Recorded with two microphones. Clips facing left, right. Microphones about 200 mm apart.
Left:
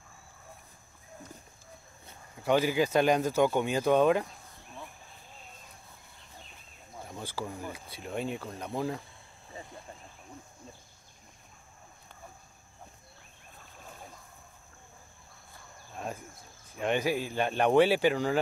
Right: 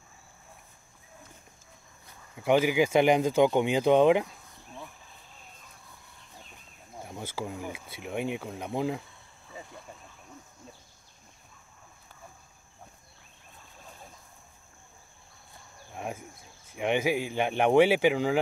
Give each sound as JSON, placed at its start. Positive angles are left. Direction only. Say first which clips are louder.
{"t": 2.4, "sound": "speech", "louder": "right 3 dB", "side_deg": -15}
{"t": 7.0, "sound": "speech", "louder": "right 2 dB", "side_deg": -10}
{"t": 15.9, "sound": "a sound", "louder": "right 2 dB", "side_deg": -15}
{"t": 16.7, "sound": "speech", "louder": "right 2 dB", "side_deg": -15}